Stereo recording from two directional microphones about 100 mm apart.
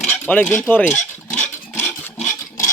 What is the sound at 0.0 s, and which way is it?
Cutlery, 15° left (ahead or behind).